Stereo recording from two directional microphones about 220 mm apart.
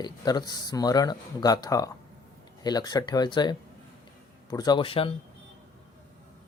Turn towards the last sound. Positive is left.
turn(degrees=25)  # may be behind; listen again after turning